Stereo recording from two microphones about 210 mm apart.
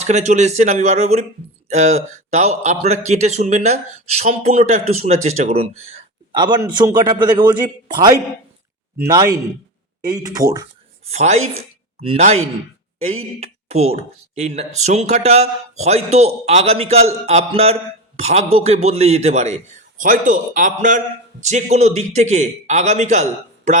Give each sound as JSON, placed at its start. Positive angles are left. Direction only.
{"t": 0.0, "sound": "a man's voice", "side_deg": -35}
{"t": 9.0, "sound": "speech", "side_deg": -15}
{"t": 11.0, "sound": "speech", "side_deg": -30}
{"t": 13.4, "sound": "a man's voice", "side_deg": -30}